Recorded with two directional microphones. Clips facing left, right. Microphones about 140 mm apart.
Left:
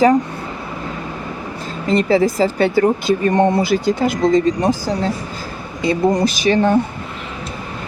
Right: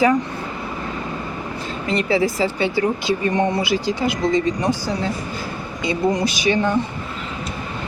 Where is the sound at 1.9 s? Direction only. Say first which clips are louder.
Left 5 dB; 40° left (ahead or behind).